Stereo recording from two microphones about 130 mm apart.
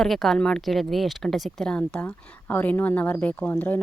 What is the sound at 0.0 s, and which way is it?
Speech, 5° left (ahead or behind).